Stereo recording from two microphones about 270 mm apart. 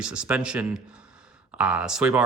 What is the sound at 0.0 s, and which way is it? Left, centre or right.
Speech, centre.